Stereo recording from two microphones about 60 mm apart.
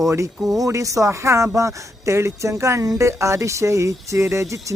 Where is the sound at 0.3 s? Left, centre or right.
Centre.